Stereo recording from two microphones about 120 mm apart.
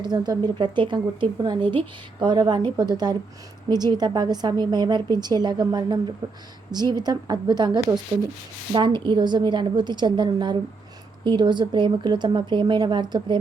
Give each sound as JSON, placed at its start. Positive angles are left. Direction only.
{"t": 0.0, "sound": "speech", "side_deg": -35}